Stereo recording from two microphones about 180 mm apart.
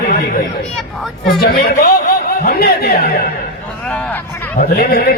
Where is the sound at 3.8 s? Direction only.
10° left (ahead or behind).